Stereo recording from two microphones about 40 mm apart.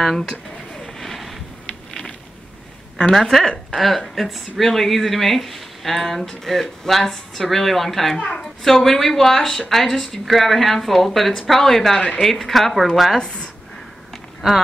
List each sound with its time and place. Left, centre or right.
0.0 s speech: centre
0.7 s vehicle: centre
1.0 s a sound: centre
3.2 s speech: centre
13.2 s a woman's voice: left